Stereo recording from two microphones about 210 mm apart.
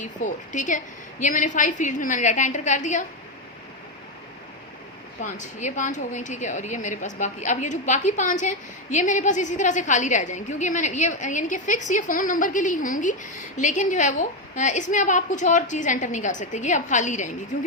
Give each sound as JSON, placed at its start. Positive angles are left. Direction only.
{"t": 0.0, "sound": "a woman's voice", "side_deg": 35}
{"t": 5.2, "sound": "a woman's voice", "side_deg": 35}